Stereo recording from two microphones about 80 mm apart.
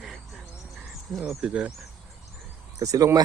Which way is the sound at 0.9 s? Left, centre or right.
Centre.